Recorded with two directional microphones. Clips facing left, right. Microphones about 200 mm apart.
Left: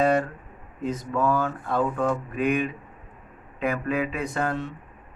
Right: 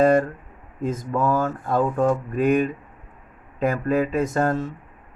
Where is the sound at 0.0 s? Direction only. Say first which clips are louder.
Right 5 dB; 50° right (ahead or behind).